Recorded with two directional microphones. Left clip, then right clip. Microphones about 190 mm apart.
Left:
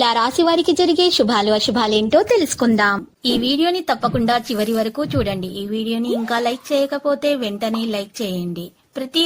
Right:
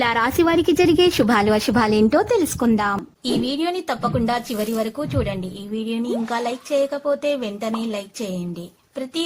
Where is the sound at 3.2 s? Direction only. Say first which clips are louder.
Left 6 dB; 25° left (ahead or behind).